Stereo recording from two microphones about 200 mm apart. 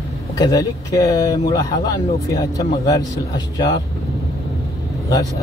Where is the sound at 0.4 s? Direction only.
20° left (ahead or behind).